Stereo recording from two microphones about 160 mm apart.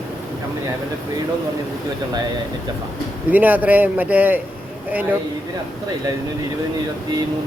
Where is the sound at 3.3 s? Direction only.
10° right (ahead or behind).